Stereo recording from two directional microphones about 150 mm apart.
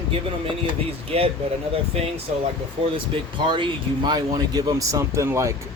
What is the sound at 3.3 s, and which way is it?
Speech, 30° right (ahead or behind).